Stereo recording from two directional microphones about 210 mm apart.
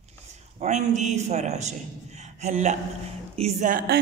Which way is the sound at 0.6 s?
35° right (ahead or behind).